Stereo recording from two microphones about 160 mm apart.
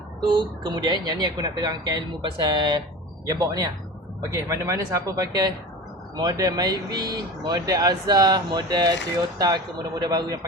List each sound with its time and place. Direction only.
0.2 s speech: 25° right (ahead or behind)
4.3 s speech: 20° right (ahead or behind)